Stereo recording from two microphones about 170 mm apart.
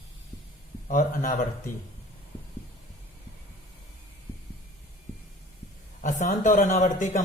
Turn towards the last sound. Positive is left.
turn(degrees=50)  # may be behind; listen again after turning